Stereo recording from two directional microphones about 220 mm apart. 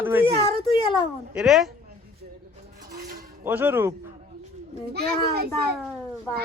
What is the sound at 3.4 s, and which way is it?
Speech, 10° right (ahead or behind).